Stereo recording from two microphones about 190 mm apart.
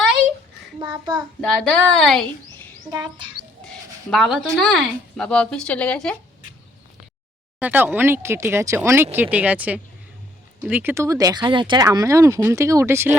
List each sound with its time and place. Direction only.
1.5 s a woman's voice: centre (ahead or behind)
2.9 s speech: 25° right (ahead or behind)
3.7 s speech: centre (ahead or behind)
7.6 s speech: 10° right (ahead or behind)